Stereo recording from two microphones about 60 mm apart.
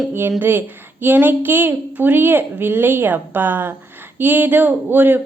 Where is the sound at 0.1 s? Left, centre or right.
Right.